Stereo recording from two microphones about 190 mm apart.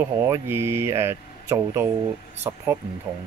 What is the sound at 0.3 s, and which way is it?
Speech, 15° right (ahead or behind).